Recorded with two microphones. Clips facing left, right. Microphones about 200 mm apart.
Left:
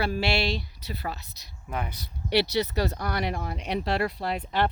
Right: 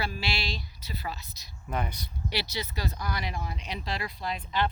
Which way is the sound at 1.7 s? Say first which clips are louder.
Even; 5° left (ahead or behind).